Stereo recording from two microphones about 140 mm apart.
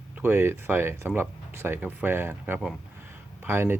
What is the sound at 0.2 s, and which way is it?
Speech, 15° right (ahead or behind).